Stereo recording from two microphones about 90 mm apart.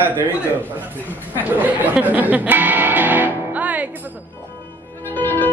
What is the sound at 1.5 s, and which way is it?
Music, 20° right (ahead or behind).